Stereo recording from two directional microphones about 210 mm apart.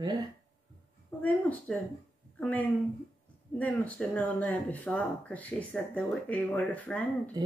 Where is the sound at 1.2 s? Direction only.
5° left (ahead or behind).